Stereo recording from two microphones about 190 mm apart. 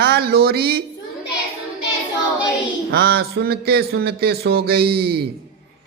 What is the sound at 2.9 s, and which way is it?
A man's voice, 55° right (ahead or behind).